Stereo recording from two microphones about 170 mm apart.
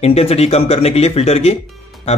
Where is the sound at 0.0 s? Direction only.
35° left (ahead or behind).